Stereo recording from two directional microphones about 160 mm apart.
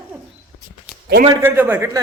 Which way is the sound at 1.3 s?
15° right (ahead or behind).